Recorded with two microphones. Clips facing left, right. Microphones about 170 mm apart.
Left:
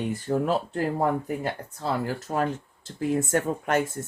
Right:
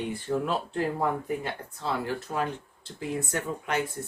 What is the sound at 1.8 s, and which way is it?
Speech, 45° left (ahead or behind).